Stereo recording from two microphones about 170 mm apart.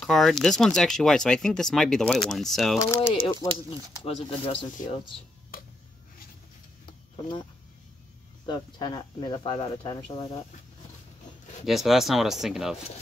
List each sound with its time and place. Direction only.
0.0 s speech: centre (ahead or behind)
2.8 s speech: 15° left (ahead or behind)
3.3 s speech: 25° right (ahead or behind)
4.0 s speech: 30° left (ahead or behind)
5.5 s a sound: 60° left (ahead or behind)
8.5 s speech: 25° left (ahead or behind)
11.6 s speech: centre (ahead or behind)